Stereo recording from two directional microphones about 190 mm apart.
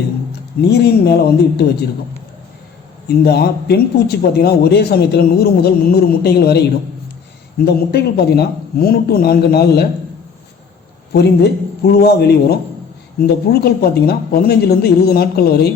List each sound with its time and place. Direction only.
0.7 s speech: 60° left (ahead or behind)
3.1 s speech: 55° left (ahead or behind)
11.1 s speech: 60° left (ahead or behind)